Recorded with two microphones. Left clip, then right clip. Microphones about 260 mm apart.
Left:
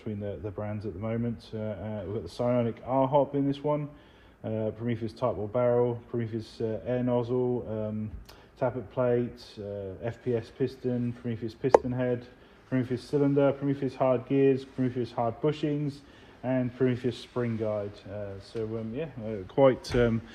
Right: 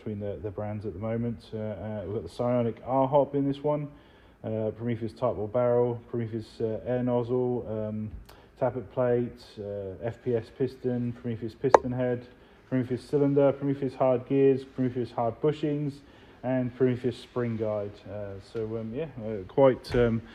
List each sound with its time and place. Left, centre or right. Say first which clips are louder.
0.0 s speech: right 1 dB; right